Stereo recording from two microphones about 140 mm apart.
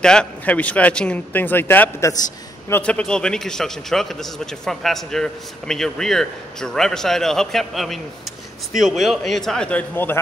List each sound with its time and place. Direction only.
0.0 s speech: 5° left (ahead or behind); by 2.2 s 20° left (ahead or behind)
2.7 s a man's voice: 10° left (ahead or behind)